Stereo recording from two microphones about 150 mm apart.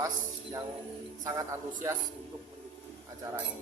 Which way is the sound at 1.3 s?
20° right (ahead or behind).